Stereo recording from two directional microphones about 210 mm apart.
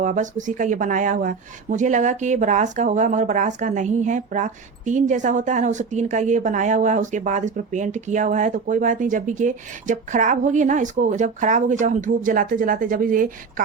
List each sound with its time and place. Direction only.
0.0 s speech: 35° right (ahead or behind)